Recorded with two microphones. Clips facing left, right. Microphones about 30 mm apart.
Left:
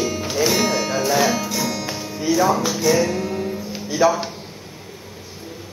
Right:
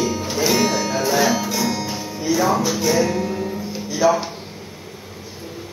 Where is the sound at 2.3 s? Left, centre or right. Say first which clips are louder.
Left 1 dB; centre.